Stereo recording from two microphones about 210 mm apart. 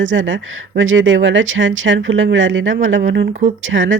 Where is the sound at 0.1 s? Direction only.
60° right (ahead or behind).